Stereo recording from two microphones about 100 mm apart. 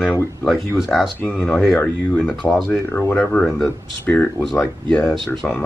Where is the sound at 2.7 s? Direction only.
20° left (ahead or behind).